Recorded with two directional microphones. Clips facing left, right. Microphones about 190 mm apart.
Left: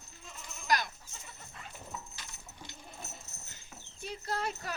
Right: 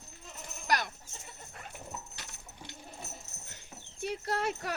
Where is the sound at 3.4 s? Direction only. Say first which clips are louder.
Right 2 dB; 70° right (ahead or behind).